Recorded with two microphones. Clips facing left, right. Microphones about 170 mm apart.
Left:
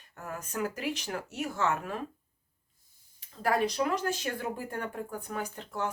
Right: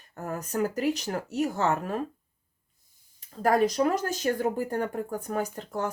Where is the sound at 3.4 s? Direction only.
45° right (ahead or behind).